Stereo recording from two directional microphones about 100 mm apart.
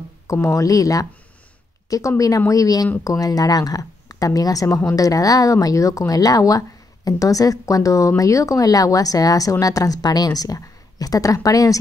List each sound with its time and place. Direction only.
0.3 s speech: 30° left (ahead or behind)